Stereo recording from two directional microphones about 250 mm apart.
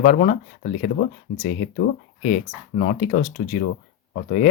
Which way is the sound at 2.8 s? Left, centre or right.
Left.